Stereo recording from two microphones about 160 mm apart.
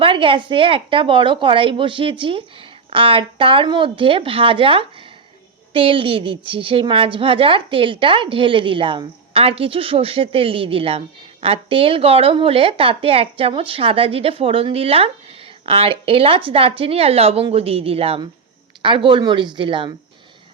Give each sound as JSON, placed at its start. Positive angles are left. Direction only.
{"t": 0.0, "sound": "a woman's voice", "side_deg": -35}